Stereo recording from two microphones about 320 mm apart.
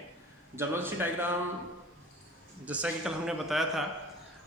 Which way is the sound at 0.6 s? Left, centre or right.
Centre.